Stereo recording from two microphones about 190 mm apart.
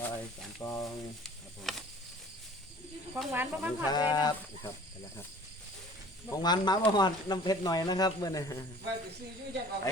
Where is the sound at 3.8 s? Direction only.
20° left (ahead or behind).